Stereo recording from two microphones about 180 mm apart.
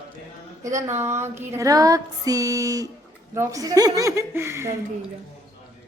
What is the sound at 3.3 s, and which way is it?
A woman's voice, 15° right (ahead or behind).